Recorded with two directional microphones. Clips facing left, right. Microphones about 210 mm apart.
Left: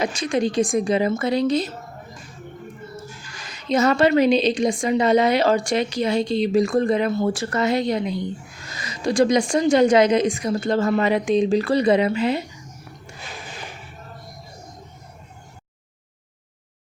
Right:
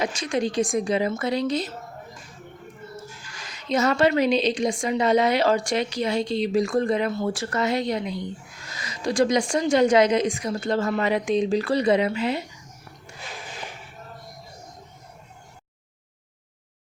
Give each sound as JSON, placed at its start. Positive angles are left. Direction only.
{"t": 0.1, "sound": "speech", "side_deg": 20}
{"t": 3.7, "sound": "a woman's voice", "side_deg": 25}